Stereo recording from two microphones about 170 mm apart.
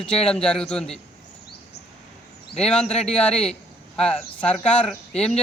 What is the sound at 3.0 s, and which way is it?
Speech, 5° left (ahead or behind).